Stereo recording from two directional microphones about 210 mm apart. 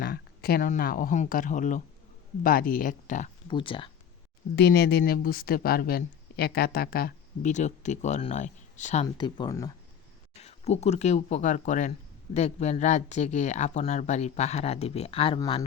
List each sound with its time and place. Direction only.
0.0 s speech: 50° left (ahead or behind)
3.5 s speech: 25° left (ahead or behind)
4.5 s speech: 50° left (ahead or behind); by 9.0 s 35° left (ahead or behind)
9.1 s speech: 20° left (ahead or behind)
10.3 s speech: 30° left (ahead or behind)